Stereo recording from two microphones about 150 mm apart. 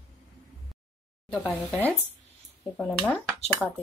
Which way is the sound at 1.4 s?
Centre (ahead or behind).